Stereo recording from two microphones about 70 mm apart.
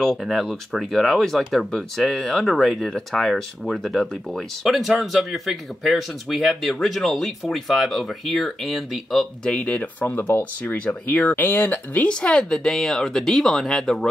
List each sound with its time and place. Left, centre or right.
0.0 s speech: centre
9.5 s speech: centre
12.1 s speech: centre